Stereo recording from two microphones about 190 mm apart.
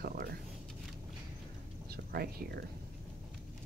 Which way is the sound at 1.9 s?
55° right (ahead or behind).